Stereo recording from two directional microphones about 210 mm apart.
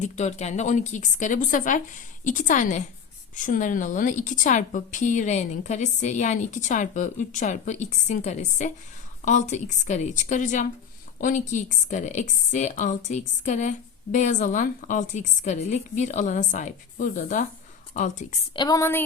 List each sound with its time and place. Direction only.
0.0 s a woman's voice: 35° left (ahead or behind)
18.5 s a woman's voice: 20° left (ahead or behind)